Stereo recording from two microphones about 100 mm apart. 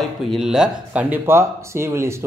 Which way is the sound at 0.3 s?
5° right (ahead or behind).